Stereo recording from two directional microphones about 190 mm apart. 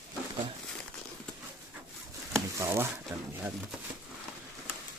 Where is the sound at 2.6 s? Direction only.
15° right (ahead or behind).